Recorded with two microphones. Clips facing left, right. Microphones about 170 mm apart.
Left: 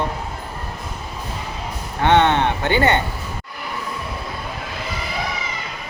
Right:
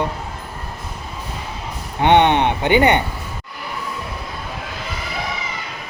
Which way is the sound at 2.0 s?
20° right (ahead or behind).